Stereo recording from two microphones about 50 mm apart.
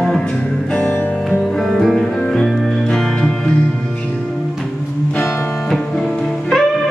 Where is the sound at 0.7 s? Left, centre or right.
Left.